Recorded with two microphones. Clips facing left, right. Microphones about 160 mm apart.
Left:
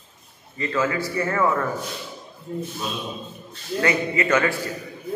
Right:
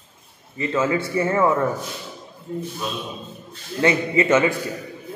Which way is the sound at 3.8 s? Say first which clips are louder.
Right 3 dB; 25° right (ahead or behind).